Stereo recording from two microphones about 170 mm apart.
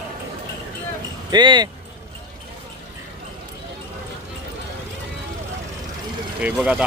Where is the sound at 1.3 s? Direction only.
25° right (ahead or behind).